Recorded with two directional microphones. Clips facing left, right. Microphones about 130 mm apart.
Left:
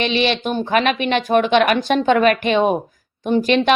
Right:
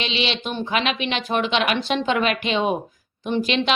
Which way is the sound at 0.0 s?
50° left (ahead or behind).